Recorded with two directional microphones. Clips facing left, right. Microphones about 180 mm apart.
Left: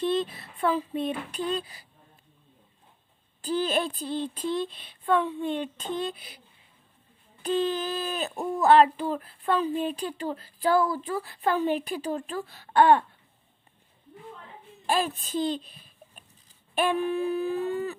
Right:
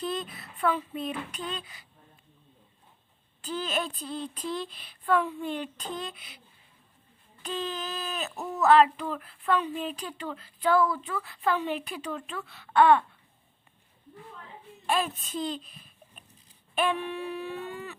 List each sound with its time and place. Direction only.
0.0 s speech: 30° left (ahead or behind)
3.4 s a woman's voice: 35° left (ahead or behind)
7.4 s speech: 35° left (ahead or behind)
14.8 s speech: 35° left (ahead or behind)
16.9 s speech: 35° left (ahead or behind)